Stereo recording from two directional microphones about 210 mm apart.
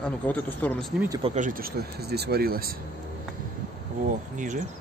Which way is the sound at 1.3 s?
40° right (ahead or behind).